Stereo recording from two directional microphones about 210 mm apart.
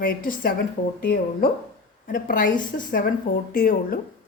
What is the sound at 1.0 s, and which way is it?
Speech, 50° left (ahead or behind).